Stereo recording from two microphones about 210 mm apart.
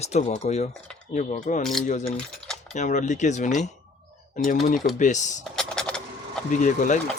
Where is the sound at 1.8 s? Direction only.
35° left (ahead or behind).